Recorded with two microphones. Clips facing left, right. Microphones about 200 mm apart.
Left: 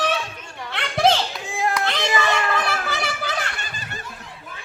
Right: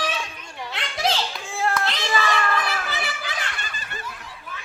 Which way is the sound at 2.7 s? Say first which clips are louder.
Left 3 dB; 50° left (ahead or behind).